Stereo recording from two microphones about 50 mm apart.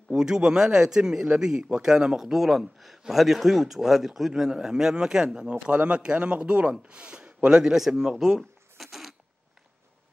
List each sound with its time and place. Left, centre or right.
0.1 s a man's voice: centre
7.5 s a man's voice: centre
8.4 s cash register: centre